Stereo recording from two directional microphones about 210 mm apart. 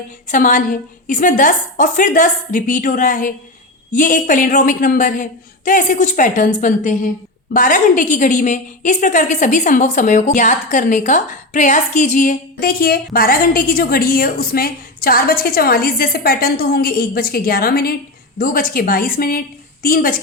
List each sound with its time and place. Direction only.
0.3 s a woman's voice: 40° left (ahead or behind)